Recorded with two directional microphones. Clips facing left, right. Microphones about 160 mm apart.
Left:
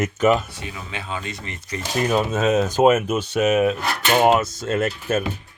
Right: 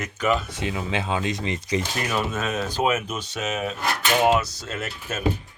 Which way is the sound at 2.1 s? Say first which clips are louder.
Left 9 dB; 40° left (ahead or behind).